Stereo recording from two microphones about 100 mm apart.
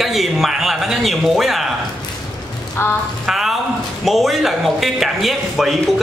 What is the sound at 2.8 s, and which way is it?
Speech, 25° left (ahead or behind).